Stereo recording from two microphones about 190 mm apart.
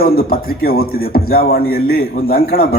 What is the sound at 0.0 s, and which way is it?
Speech, 50° left (ahead or behind).